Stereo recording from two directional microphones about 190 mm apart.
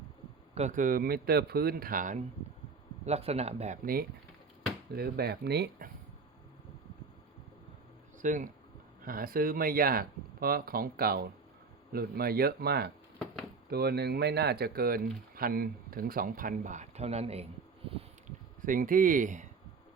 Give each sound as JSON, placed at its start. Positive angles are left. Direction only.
{"t": 0.5, "sound": "speech", "side_deg": -40}
{"t": 3.1, "sound": "speech", "side_deg": -35}
{"t": 4.9, "sound": "speech", "side_deg": -55}
{"t": 8.2, "sound": "speech", "side_deg": -40}
{"t": 18.6, "sound": "speech", "side_deg": -45}